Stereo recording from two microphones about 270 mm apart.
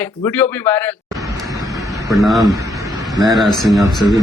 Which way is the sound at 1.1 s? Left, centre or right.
Centre.